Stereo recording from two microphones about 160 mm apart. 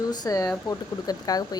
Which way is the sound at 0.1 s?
25° left (ahead or behind).